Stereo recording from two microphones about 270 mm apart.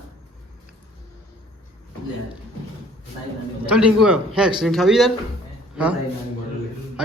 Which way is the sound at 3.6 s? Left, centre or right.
Centre.